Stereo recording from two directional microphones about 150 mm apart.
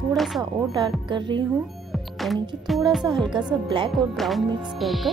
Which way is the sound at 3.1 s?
30° right (ahead or behind).